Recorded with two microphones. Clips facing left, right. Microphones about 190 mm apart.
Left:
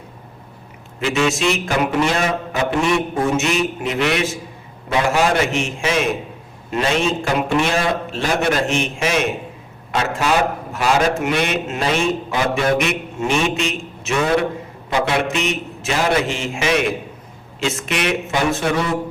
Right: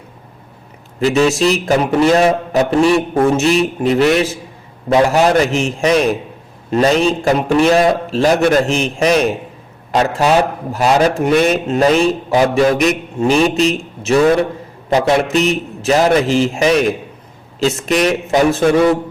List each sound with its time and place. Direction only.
0.9 s a man's voice: 35° right (ahead or behind)